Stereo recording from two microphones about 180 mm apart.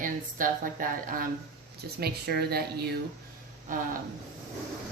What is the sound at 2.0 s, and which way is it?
Speech, 60° right (ahead or behind).